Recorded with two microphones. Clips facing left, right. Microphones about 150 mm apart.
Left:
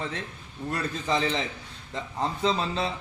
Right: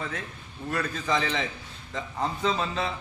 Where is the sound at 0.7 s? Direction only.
30° left (ahead or behind).